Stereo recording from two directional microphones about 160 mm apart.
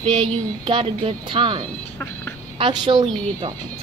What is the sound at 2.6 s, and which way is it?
Speech, 25° right (ahead or behind).